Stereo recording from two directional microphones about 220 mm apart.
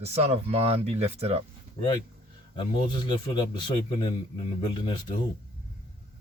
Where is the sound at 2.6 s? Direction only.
20° left (ahead or behind).